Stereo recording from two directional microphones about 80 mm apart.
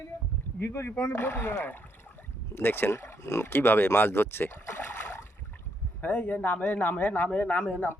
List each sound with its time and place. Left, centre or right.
0.6 s speech: left
6.0 s speech: centre